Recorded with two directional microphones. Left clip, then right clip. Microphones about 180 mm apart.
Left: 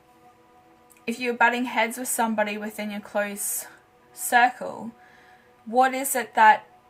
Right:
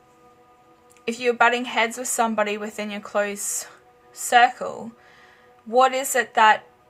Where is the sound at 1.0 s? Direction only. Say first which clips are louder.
Right 3 dB; 40° right (ahead or behind).